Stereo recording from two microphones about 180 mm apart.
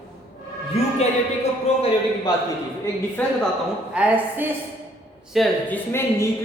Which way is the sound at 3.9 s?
10° right (ahead or behind).